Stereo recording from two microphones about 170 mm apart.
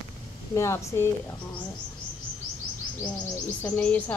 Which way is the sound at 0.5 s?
15° left (ahead or behind).